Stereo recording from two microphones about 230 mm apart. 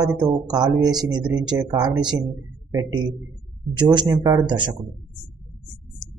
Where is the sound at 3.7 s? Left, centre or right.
Centre.